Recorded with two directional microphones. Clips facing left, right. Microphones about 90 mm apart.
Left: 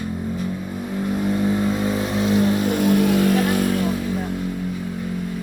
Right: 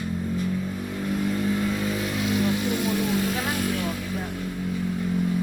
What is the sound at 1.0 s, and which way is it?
Vehicle, 25° left (ahead or behind).